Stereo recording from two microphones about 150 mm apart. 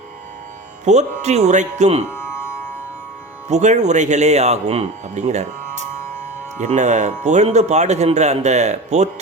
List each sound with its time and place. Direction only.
0.9 s speech: 50° right (ahead or behind)
2.0 s music: 15° left (ahead or behind)
3.5 s speech: 50° right (ahead or behind)